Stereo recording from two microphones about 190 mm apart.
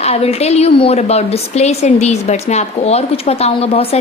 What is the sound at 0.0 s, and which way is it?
A woman's voice, 30° left (ahead or behind).